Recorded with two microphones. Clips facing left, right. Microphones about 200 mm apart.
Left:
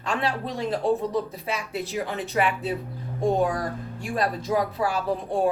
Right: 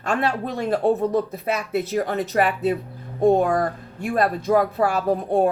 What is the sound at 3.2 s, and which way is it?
Speech, 55° right (ahead or behind).